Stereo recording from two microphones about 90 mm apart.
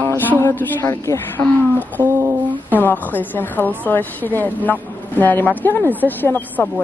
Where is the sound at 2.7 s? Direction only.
20° left (ahead or behind).